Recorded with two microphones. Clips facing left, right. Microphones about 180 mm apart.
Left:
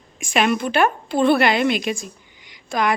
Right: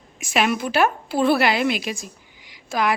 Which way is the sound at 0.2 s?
5° right (ahead or behind).